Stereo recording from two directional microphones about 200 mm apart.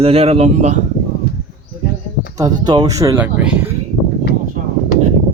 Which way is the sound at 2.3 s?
20° right (ahead or behind).